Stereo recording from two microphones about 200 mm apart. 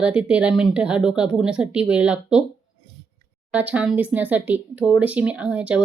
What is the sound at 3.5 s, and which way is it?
Speech, 5° right (ahead or behind).